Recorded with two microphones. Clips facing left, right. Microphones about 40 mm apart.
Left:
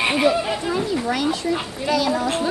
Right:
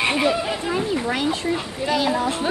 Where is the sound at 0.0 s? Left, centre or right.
Centre.